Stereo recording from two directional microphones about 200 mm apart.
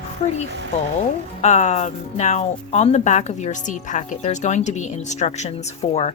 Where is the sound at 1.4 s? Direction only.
35° left (ahead or behind).